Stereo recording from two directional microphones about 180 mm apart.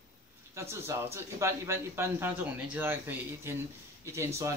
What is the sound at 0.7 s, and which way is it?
Speech, 15° right (ahead or behind).